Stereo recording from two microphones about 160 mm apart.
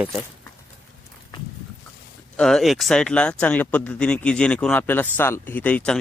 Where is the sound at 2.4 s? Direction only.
5° left (ahead or behind).